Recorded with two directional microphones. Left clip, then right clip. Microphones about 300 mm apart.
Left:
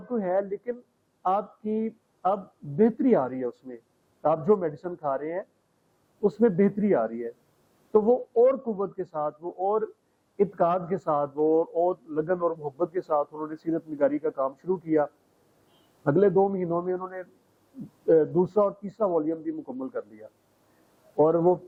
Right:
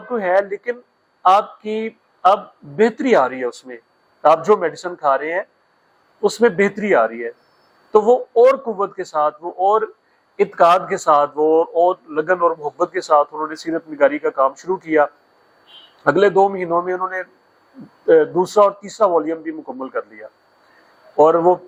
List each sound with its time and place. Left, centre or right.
0.0 s a man's voice: centre
8.0 s speech: right
8.4 s a man's voice: centre
9.4 s speech: right
10.3 s a man's voice: centre
11.7 s speech: right
12.1 s a man's voice: centre
15.7 s a sound: centre
16.4 s a man's voice: centre